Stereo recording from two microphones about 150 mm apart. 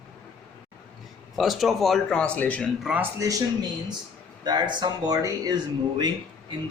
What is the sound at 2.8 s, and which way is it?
Speech, 5° right (ahead or behind).